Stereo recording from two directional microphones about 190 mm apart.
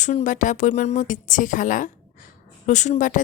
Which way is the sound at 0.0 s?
40° left (ahead or behind).